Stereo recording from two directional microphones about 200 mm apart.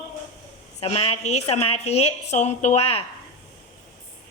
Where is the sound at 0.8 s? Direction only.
25° left (ahead or behind).